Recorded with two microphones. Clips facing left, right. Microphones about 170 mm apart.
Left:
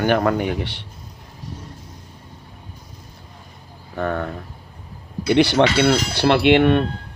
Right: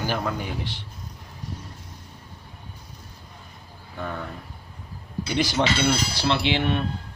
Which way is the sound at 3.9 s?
60° left (ahead or behind).